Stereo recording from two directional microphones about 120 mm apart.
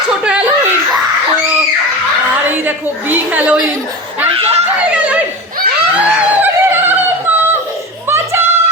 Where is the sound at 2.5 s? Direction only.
15° right (ahead or behind).